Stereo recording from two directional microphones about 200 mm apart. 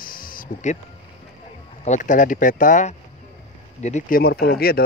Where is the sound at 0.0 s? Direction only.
45° left (ahead or behind).